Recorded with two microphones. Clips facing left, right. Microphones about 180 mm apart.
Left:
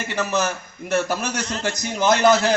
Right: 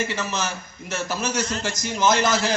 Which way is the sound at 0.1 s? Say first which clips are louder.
Left 5 dB; 55° left (ahead or behind).